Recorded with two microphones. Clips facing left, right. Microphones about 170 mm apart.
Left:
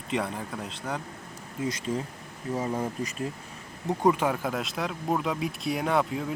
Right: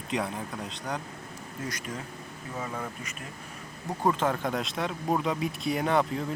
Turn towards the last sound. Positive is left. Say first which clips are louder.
# even
turn(degrees=0)  # may be behind; listen again after turning